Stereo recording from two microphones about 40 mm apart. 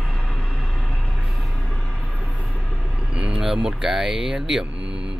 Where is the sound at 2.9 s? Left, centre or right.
Right.